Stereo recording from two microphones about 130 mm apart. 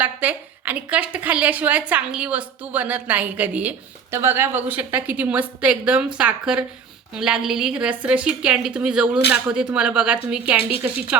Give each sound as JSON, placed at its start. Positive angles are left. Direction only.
{"t": 0.0, "sound": "a woman's voice", "side_deg": -15}